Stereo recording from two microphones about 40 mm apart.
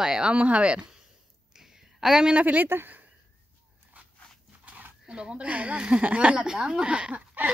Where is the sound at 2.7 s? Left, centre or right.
Right.